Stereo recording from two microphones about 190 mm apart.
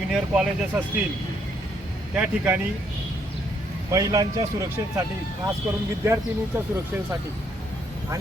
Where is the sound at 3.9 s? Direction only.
20° right (ahead or behind).